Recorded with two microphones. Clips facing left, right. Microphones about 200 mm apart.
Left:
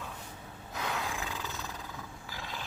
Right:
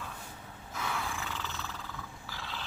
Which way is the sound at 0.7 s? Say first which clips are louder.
Left 1 dB; 20° left (ahead or behind).